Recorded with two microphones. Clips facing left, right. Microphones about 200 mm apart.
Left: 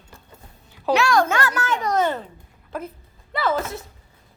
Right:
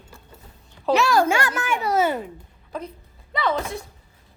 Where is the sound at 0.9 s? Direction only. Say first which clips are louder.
Even; centre (ahead or behind).